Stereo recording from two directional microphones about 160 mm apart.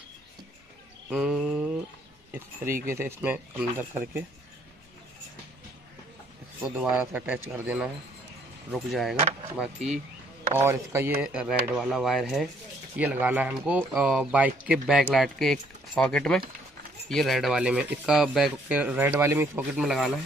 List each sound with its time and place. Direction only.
1.0 s speech: 5° right (ahead or behind)
2.3 s speech: 15° right (ahead or behind)
6.6 s speech: 5° right (ahead or behind)
10.6 s speech: 15° right (ahead or behind)
11.1 s speech: 5° right (ahead or behind)
19.7 s speech: 5° right (ahead or behind)